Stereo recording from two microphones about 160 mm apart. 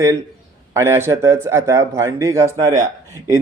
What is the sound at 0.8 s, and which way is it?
A man's voice, 15° right (ahead or behind).